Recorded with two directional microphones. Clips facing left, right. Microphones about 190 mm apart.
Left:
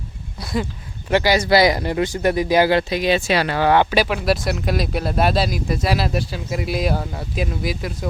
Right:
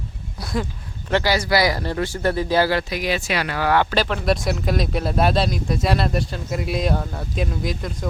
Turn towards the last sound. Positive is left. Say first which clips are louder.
# left 1 dB
turn(degrees=5)  # may be behind; listen again after turning